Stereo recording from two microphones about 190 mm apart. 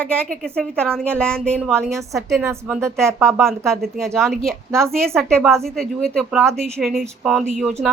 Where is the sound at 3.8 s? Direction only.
Centre (ahead or behind).